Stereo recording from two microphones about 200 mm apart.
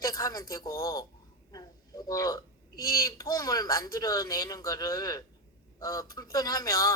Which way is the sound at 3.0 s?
20° left (ahead or behind).